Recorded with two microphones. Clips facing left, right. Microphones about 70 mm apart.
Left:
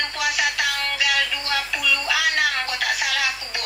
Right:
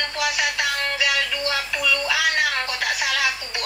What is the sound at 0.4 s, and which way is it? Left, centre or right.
Music, right.